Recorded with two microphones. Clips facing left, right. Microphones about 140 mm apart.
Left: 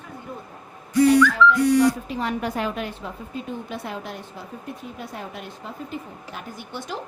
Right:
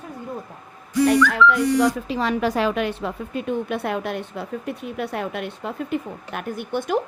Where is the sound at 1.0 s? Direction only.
70° right (ahead or behind).